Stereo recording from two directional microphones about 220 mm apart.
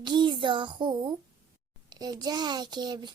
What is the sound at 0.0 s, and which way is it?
A child's voice, 20° right (ahead or behind).